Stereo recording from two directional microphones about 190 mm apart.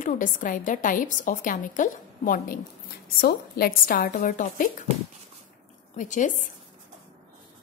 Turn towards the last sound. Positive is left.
turn(degrees=40)  # may be behind; listen again after turning